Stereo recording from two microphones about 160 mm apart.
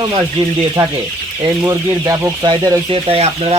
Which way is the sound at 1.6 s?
20° right (ahead or behind).